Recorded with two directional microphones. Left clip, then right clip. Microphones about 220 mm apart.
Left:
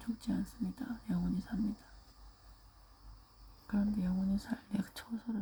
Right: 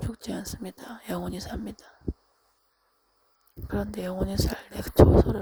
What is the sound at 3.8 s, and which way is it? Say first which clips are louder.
Speech: right 8 dB; 50° right (ahead or behind).